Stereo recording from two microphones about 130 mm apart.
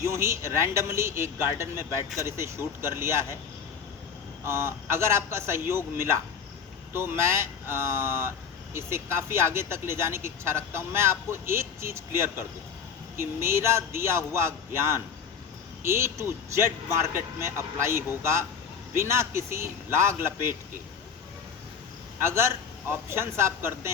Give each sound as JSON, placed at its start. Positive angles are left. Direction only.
{"t": 0.0, "sound": "speech", "side_deg": -20}
{"t": 4.4, "sound": "speech", "side_deg": -20}
{"t": 22.3, "sound": "speech", "side_deg": -20}